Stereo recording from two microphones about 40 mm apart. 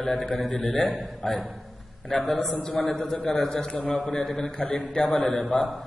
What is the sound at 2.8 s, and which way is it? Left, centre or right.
A man's voice, centre.